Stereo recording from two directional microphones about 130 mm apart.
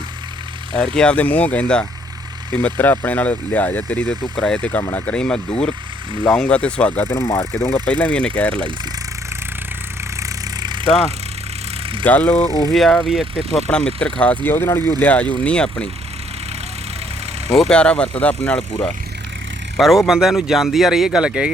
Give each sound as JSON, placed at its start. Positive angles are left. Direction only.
{"t": 0.8, "sound": "speech", "side_deg": 5}
{"t": 10.2, "sound": "vehicle", "side_deg": -30}
{"t": 12.0, "sound": "speech", "side_deg": 10}
{"t": 12.5, "sound": "speech", "side_deg": 30}
{"t": 12.7, "sound": "speech", "side_deg": 0}
{"t": 13.7, "sound": "speech", "side_deg": 10}
{"t": 17.5, "sound": "speech", "side_deg": 5}
{"t": 19.7, "sound": "speech", "side_deg": 0}